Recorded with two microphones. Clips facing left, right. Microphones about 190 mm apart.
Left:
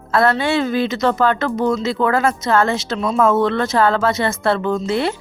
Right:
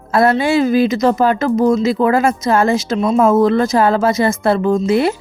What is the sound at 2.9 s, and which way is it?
A woman's voice, 10° right (ahead or behind).